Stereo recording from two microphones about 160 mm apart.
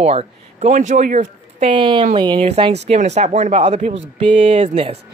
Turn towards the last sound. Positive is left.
turn(degrees=-40)  # may be behind; listen again after turning